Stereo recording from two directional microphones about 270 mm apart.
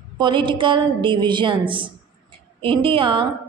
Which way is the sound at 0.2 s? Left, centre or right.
Centre.